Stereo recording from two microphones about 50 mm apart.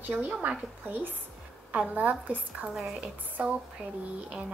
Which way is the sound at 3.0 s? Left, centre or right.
Right.